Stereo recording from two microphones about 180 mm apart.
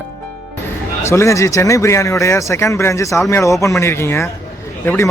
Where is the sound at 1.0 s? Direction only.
15° left (ahead or behind).